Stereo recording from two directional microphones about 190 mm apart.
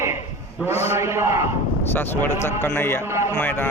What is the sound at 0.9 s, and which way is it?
Speech, 15° right (ahead or behind).